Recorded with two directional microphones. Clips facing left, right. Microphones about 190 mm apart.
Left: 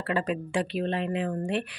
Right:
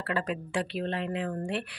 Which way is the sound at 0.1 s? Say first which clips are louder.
Left 3 dB; 20° left (ahead or behind).